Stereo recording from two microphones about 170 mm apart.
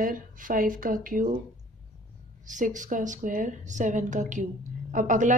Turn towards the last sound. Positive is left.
turn(degrees=-50)  # may be behind; listen again after turning